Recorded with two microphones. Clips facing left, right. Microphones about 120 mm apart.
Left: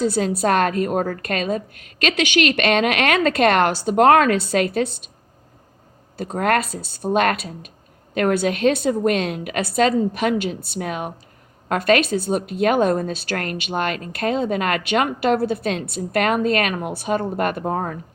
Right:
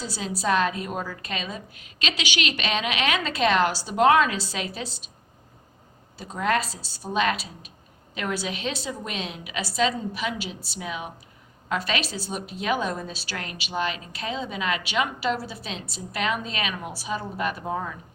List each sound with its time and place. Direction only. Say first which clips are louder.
0.0 s a woman's voice: left 10 dB; 50° left (ahead or behind)
6.1 s a woman's voice: left 5 dB; 55° left (ahead or behind)